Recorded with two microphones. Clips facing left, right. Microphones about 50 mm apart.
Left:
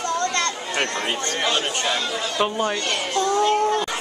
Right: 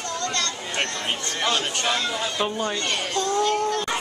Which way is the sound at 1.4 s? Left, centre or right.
Left.